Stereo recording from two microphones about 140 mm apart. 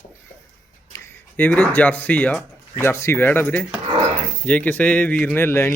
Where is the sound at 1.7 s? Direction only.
10° left (ahead or behind).